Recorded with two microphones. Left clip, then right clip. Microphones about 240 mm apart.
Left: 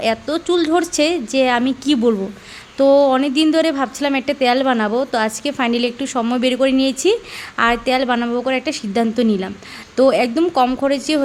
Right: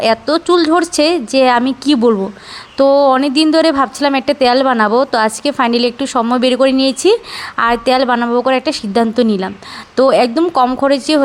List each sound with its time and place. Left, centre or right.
0.0 s a woman's voice: centre